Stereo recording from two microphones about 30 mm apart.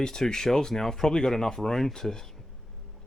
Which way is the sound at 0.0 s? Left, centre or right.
Left.